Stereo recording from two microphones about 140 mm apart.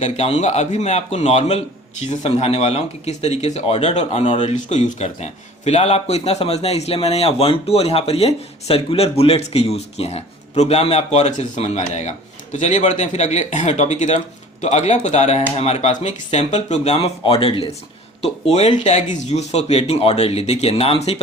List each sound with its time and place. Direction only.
0.0 s a man's voice: 50° left (ahead or behind)